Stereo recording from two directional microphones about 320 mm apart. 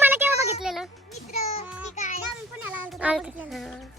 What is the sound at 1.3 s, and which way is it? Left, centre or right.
Speech, centre.